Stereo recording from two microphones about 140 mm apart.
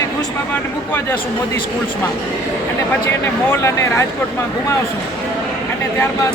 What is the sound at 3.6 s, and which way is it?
Speech, 20° left (ahead or behind).